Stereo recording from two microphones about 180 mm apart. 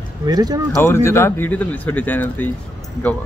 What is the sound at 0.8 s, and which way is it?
Speech, 15° left (ahead or behind).